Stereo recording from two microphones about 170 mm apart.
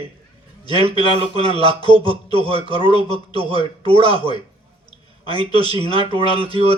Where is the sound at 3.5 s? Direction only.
25° left (ahead or behind).